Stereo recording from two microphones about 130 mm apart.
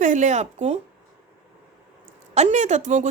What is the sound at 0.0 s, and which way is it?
Speech, 75° right (ahead or behind).